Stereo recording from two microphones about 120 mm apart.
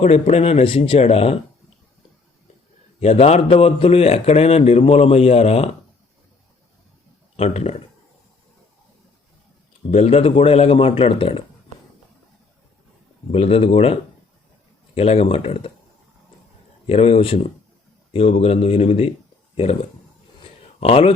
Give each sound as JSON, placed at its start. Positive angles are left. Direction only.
{"t": 0.0, "sound": "a man's voice", "side_deg": 60}
{"t": 3.0, "sound": "a man's voice", "side_deg": 60}
{"t": 7.3, "sound": "a man's voice", "side_deg": 60}
{"t": 9.9, "sound": "a man's voice", "side_deg": 60}
{"t": 13.3, "sound": "a man's voice", "side_deg": 55}
{"t": 16.8, "sound": "a man's voice", "side_deg": 55}